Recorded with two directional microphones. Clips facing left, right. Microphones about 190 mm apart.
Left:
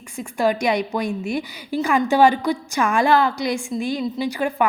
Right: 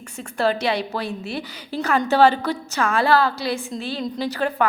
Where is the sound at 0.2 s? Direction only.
10° left (ahead or behind).